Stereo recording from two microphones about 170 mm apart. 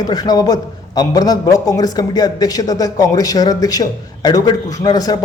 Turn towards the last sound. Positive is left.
turn(degrees=20)  # may be behind; listen again after turning